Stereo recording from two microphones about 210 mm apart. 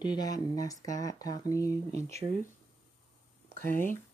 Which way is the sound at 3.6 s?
10° left (ahead or behind).